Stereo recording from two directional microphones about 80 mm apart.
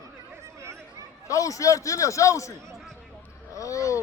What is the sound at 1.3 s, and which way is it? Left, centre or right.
A man's voice, left.